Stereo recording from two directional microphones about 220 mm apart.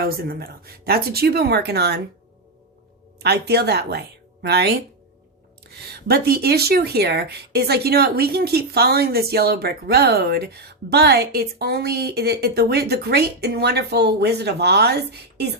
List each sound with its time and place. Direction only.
0.0 s speech: 45° right (ahead or behind)
3.2 s speech: 50° right (ahead or behind)